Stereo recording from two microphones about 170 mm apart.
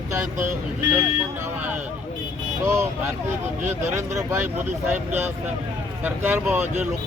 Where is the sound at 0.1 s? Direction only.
15° right (ahead or behind).